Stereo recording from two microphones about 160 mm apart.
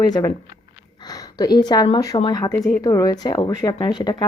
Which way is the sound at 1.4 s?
25° left (ahead or behind).